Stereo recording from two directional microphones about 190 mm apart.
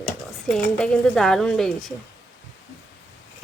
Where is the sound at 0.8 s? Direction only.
5° left (ahead or behind).